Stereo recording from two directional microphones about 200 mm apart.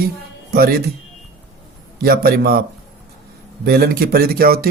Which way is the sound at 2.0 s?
50° right (ahead or behind).